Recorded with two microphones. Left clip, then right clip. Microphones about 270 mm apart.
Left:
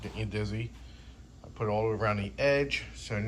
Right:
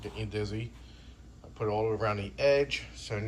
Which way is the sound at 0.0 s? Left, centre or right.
Centre.